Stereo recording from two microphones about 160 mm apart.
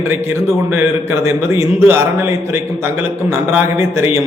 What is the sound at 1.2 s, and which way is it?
A man's voice, 15° right (ahead or behind).